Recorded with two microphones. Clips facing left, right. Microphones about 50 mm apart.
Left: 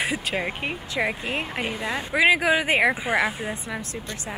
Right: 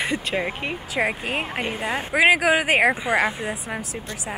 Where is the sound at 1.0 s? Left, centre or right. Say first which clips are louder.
Right 2 dB; centre.